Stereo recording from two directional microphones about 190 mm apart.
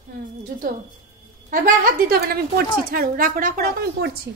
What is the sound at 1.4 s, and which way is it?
A woman's voice, 45° right (ahead or behind).